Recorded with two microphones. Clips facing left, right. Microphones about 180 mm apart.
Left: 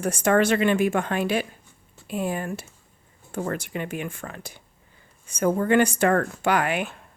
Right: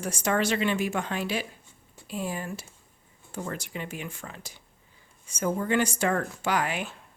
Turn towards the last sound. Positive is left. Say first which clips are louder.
# left 5 dB
turn(degrees=60)  # may be behind; listen again after turning